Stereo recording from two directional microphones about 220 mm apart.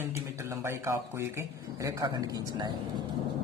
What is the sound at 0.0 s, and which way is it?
A man's voice, 10° right (ahead or behind).